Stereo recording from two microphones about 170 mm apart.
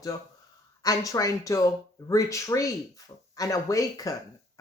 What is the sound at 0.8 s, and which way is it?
Speech, 20° left (ahead or behind).